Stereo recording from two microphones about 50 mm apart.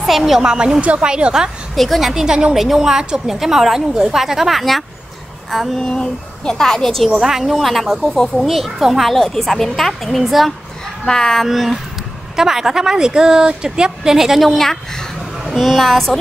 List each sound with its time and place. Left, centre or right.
0.0 s a woman's voice: centre
5.8 s a woman's voice: centre
7.1 s speech: centre
11.1 s a woman's voice: centre
11.4 s a woman's voice: centre
15.4 s a woman's voice: centre